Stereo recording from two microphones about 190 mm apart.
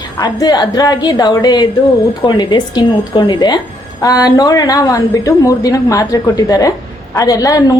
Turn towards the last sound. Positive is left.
turn(degrees=20)  # may be behind; listen again after turning